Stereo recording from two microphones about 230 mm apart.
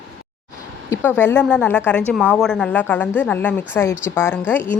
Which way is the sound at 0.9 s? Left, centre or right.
Centre.